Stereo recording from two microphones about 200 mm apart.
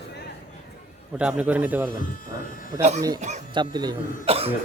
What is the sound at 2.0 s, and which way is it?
Electric shaver, 45° left (ahead or behind).